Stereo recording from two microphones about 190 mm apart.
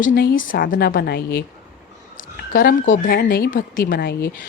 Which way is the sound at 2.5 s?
45° left (ahead or behind).